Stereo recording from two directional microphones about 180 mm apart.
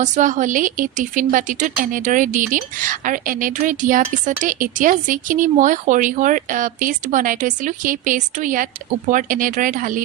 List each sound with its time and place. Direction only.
0.0 s speech: 45° right (ahead or behind)